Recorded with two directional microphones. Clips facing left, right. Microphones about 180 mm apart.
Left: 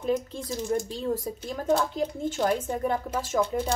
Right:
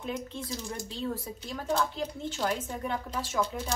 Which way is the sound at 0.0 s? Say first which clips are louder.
Left 8 dB; 40° left (ahead or behind).